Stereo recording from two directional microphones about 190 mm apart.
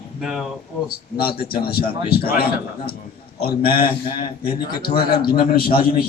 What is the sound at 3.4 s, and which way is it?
A man's voice, 55° left (ahead or behind).